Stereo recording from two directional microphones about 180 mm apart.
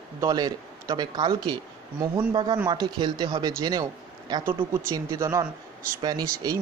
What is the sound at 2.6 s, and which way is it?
Speech, 25° right (ahead or behind).